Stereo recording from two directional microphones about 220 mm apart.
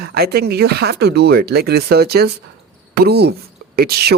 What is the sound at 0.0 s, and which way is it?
Speech, 45° right (ahead or behind).